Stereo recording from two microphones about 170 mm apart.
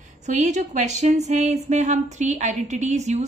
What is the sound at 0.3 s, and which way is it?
Speech, 45° right (ahead or behind).